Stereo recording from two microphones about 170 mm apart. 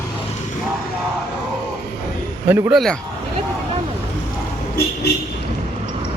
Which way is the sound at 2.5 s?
10° right (ahead or behind).